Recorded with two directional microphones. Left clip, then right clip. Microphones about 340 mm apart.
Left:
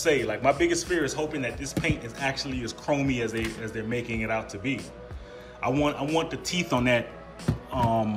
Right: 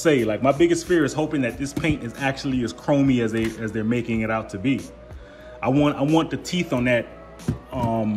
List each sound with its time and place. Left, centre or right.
0.0 s speech: centre
7.7 s music: left